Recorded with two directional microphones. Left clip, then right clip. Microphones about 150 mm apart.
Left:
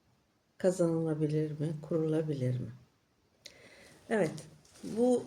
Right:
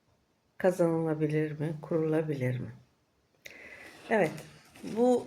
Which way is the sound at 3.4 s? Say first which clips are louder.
Right 6 dB; 20° left (ahead or behind).